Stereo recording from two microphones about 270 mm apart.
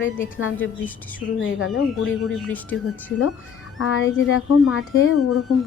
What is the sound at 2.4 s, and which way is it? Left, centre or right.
Speech, centre.